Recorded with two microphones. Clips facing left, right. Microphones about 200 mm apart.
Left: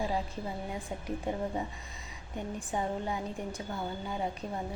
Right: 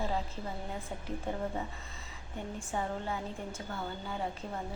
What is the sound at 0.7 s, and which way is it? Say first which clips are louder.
A woman's voice: left 3 dB; 15° left (ahead or behind).